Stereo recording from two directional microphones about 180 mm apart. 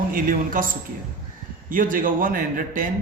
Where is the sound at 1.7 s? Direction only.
50° right (ahead or behind).